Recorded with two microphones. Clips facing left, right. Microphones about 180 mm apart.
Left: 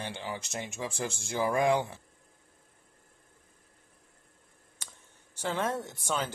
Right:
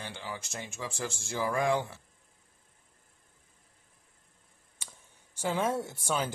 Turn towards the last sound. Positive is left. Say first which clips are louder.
# right 1 dB
turn(degrees=-10)  # may be behind; listen again after turning